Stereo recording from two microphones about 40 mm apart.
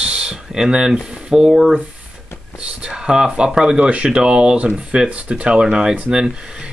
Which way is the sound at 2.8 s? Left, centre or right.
Centre.